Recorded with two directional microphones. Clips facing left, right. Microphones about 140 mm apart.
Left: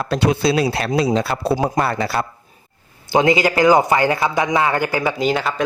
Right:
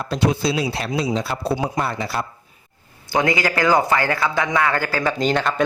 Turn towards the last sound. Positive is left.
turn(degrees=5)  # may be behind; listen again after turning